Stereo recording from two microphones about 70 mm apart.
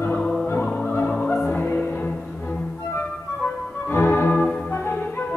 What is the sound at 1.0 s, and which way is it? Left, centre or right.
Music, centre.